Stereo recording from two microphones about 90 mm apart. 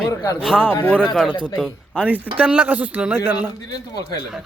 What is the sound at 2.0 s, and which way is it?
Speech, 20° right (ahead or behind).